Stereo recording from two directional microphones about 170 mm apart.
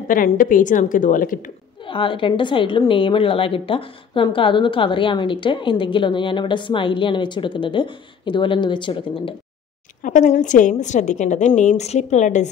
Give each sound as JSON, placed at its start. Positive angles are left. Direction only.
{"t": 0.1, "sound": "a woman's voice", "side_deg": 55}
{"t": 1.9, "sound": "a woman's voice", "side_deg": 30}
{"t": 10.0, "sound": "a woman's voice", "side_deg": 50}